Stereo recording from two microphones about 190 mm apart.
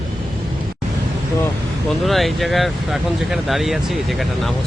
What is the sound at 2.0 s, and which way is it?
Speech, centre (ahead or behind).